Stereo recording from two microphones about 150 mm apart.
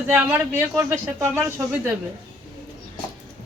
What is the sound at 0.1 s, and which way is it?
Speech, 15° right (ahead or behind).